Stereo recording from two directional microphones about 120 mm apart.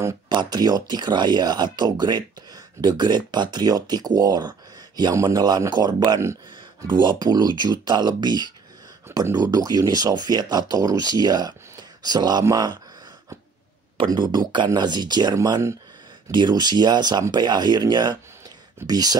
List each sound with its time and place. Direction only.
0.3 s speech: 35° right (ahead or behind)
13.9 s speech: 35° right (ahead or behind)